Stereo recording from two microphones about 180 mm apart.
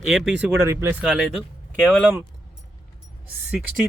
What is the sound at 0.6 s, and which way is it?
Speech, 15° right (ahead or behind).